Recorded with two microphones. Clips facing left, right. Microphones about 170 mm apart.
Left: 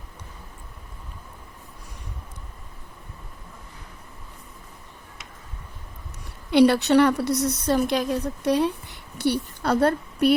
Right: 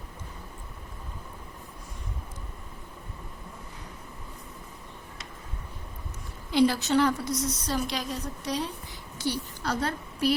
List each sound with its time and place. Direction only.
6.5 s a woman's voice: 70° left (ahead or behind)